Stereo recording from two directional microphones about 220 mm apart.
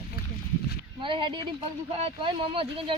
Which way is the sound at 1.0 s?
20° right (ahead or behind).